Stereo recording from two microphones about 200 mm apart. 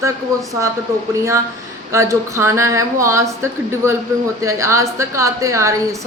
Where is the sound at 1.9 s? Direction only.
15° right (ahead or behind).